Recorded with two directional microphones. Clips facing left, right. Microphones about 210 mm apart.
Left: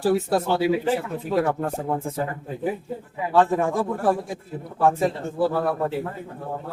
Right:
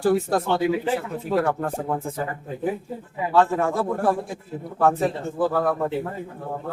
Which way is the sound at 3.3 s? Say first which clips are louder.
Even; 15° left (ahead or behind).